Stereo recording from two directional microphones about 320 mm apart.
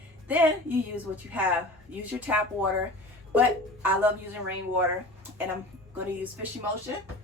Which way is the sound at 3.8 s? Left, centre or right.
Centre.